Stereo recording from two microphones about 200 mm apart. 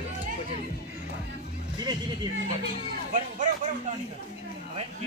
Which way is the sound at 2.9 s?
40° right (ahead or behind).